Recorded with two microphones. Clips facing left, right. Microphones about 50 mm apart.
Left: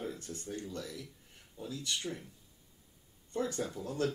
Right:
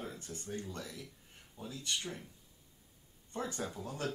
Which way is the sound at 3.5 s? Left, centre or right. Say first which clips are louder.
Left 4 dB; centre.